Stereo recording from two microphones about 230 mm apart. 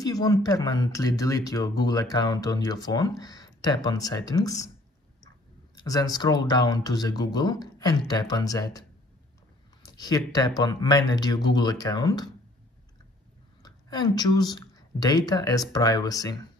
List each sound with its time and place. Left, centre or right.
0.0 s speech: centre
5.9 s speech: centre
9.8 s speech: centre
13.6 s a woman's voice: centre